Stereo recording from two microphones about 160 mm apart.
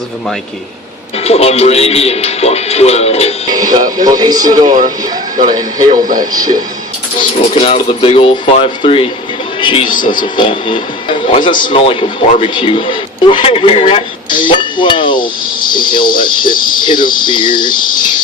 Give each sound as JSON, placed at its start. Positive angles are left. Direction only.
{"t": 1.2, "sound": "speech", "side_deg": 40}
{"t": 3.7, "sound": "speech", "side_deg": -25}
{"t": 5.9, "sound": "speech", "side_deg": -55}
{"t": 6.3, "sound": "speech", "side_deg": -25}
{"t": 7.5, "sound": "a man's voice", "side_deg": 35}